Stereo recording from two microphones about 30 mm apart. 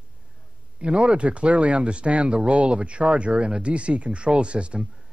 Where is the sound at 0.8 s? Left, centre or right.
Right.